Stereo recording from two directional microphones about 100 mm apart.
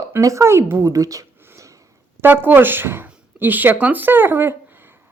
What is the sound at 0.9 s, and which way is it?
Speech, 35° right (ahead or behind).